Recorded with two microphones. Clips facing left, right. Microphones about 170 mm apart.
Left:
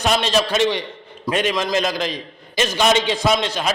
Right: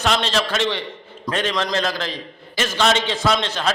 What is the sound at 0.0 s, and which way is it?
A man's voice, 15° left (ahead or behind).